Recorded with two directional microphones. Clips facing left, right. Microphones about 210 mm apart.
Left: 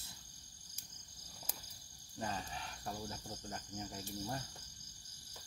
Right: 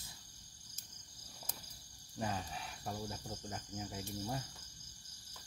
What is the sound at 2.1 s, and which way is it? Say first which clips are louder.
Speech: right 2 dB; 15° right (ahead or behind).